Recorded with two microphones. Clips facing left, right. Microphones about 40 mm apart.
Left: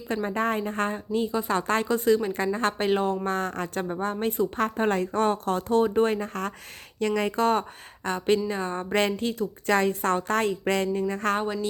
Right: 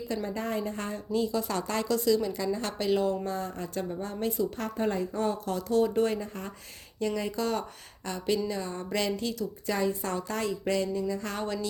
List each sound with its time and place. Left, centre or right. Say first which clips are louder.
0.1 s a woman's voice: left 7 dB; left
3.2 s a woman's voice: left 6 dB; left
6.1 s a woman's voice: left 6 dB; left
9.6 s a woman's voice: left 7 dB; left